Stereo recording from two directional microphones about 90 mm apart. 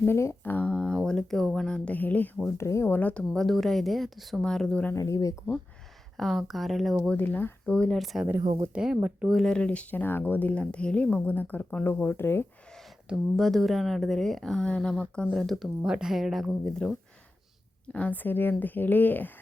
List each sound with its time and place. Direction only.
0.0 s a woman's voice: 30° left (ahead or behind)
0.5 s a sound: 15° left (ahead or behind)
1.0 s speech: 5° left (ahead or behind)
2.6 s speech: 30° left (ahead or behind)
2.8 s speech: 20° left (ahead or behind)
4.9 s speech: 35° left (ahead or behind)
6.1 s speech: centre (ahead or behind)
7.2 s a woman's voice: 20° left (ahead or behind)
7.9 s speech: centre (ahead or behind); by 9.3 s 15° right (ahead or behind)
9.3 s a woman's voice: 5° left (ahead or behind); by 12.5 s 25° left (ahead or behind)
13.1 s speech: centre (ahead or behind)
16.6 s speech: 10° left (ahead or behind)
17.9 s a woman's voice: 20° left (ahead or behind)